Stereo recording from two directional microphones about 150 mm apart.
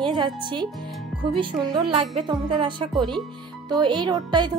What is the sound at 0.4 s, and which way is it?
Speech, 30° right (ahead or behind).